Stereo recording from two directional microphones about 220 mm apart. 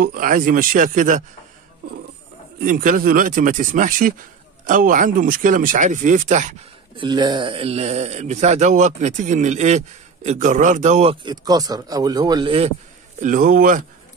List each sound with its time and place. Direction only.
0.0 s speech: 40° right (ahead or behind)
2.6 s speech: 40° right (ahead or behind)
7.0 s speech: 20° right (ahead or behind)
13.2 s speech: 35° right (ahead or behind)